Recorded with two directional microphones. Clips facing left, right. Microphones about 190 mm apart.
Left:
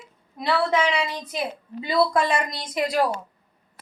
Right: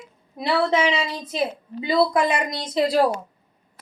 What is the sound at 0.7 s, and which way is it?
A woman's voice, 25° right (ahead or behind).